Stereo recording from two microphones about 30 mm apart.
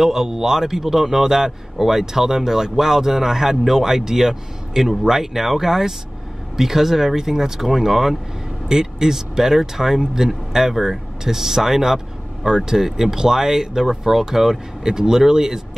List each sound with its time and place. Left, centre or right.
0.0 s speech: centre